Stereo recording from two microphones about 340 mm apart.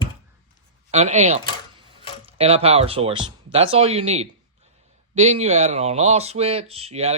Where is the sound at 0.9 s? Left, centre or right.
Centre.